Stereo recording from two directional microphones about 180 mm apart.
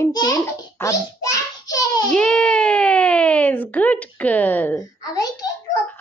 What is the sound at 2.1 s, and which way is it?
A child's voice, 5° left (ahead or behind).